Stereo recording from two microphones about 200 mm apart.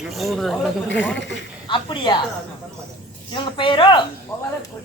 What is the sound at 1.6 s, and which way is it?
Speech, 25° left (ahead or behind).